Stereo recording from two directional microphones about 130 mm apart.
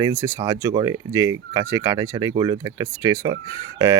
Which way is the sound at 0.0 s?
25° right (ahead or behind).